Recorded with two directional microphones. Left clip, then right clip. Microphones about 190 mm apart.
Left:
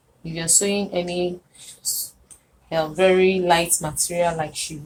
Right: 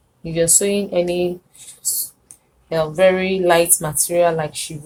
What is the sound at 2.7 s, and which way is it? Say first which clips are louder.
A woman's voice: right 3 dB; 55° right (ahead or behind).